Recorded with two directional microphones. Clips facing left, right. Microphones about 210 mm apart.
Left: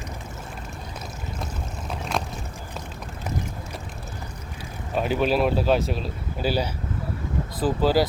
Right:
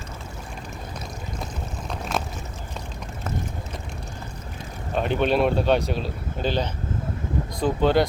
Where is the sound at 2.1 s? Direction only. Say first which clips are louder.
Even; centre (ahead or behind).